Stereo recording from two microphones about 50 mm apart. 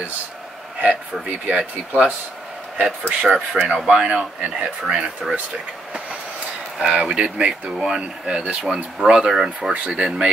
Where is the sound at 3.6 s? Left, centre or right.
Right.